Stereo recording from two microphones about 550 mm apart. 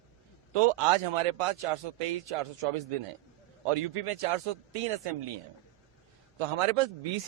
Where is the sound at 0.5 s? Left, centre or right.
Right.